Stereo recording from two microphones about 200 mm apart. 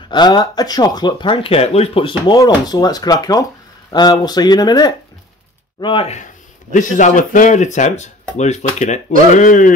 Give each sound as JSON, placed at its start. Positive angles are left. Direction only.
{"t": 0.1, "sound": "speech", "side_deg": 20}